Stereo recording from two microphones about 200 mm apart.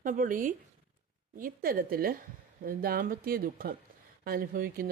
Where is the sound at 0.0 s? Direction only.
40° right (ahead or behind).